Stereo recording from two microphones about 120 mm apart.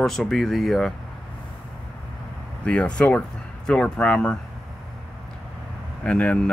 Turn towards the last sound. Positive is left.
turn(degrees=10)  # may be behind; listen again after turning